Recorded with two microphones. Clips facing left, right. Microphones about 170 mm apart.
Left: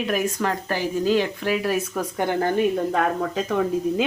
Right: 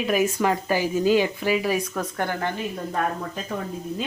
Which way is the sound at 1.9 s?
15° left (ahead or behind).